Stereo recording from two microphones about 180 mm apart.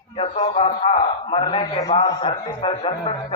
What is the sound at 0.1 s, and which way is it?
A man's voice, 35° left (ahead or behind).